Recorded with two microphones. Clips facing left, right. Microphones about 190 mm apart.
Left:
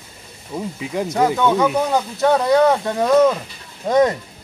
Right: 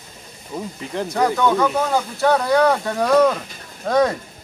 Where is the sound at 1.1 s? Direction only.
20° left (ahead or behind).